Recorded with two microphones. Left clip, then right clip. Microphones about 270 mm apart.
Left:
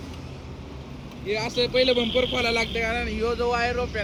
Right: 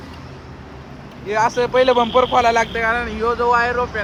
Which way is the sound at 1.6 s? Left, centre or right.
Centre.